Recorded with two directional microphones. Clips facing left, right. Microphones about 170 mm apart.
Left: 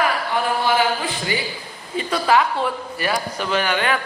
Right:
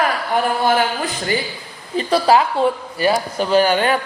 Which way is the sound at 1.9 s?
35° right (ahead or behind).